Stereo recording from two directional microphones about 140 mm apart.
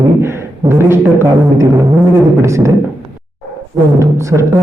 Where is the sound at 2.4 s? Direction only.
20° right (ahead or behind).